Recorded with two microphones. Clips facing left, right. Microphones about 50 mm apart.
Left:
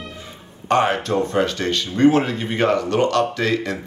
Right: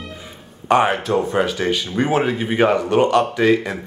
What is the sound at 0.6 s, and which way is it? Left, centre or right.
Speech, centre.